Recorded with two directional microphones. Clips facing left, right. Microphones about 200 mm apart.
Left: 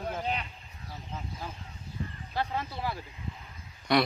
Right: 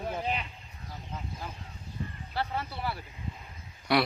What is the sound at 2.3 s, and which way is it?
Speech, 15° left (ahead or behind).